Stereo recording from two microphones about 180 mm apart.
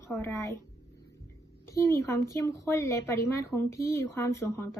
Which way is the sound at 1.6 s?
15° left (ahead or behind).